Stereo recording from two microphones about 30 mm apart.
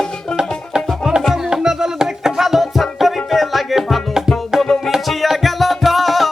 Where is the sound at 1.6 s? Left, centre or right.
Centre.